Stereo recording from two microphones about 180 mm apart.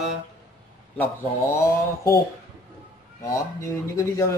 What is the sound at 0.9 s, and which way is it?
Speech, 15° left (ahead or behind).